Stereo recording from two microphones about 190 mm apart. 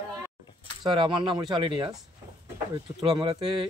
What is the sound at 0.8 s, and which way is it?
Speech, 25° right (ahead or behind).